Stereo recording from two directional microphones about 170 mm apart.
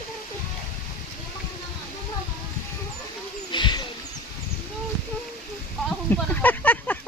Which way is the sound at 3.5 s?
25° left (ahead or behind).